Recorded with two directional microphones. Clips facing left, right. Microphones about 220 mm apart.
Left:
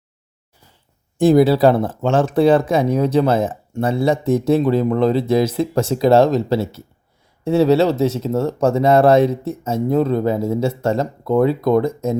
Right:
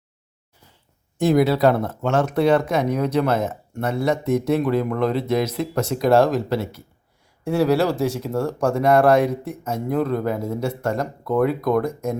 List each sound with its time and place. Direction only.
1.2 s speech: 30° left (ahead or behind)